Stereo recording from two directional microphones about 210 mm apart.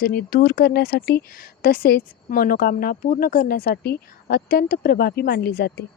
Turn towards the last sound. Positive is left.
turn(degrees=50)  # may be behind; listen again after turning